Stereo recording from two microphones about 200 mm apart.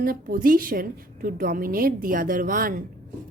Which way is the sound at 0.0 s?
45° right (ahead or behind).